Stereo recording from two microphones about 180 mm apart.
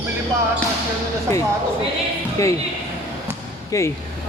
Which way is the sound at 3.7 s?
15° left (ahead or behind).